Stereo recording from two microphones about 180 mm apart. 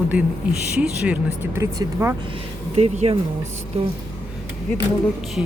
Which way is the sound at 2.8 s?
35° right (ahead or behind).